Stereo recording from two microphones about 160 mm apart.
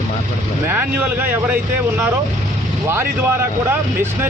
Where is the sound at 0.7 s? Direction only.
10° right (ahead or behind).